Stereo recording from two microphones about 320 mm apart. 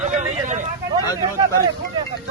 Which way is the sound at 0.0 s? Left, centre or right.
Right.